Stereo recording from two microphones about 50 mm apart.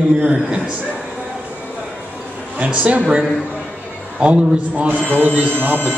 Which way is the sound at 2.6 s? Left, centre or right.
Right.